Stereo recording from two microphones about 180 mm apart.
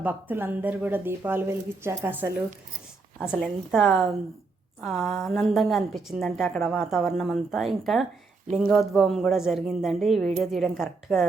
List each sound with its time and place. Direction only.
0.0 s speech: 10° right (ahead or behind)
3.2 s a woman's voice: 5° left (ahead or behind)